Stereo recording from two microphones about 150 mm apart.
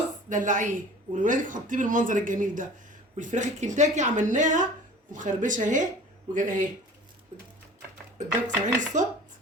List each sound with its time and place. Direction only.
0.3 s speech: 55° right (ahead or behind)
8.4 s speech: 55° right (ahead or behind)